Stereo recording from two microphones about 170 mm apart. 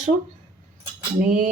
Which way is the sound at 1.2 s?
50° right (ahead or behind).